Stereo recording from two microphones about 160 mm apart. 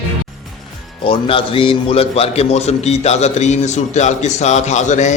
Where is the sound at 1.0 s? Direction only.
35° left (ahead or behind).